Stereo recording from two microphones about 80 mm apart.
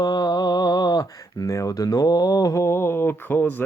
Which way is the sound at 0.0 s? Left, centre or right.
Left.